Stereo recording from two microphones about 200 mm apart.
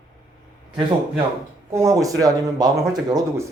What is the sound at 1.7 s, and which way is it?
Speech, 15° right (ahead or behind).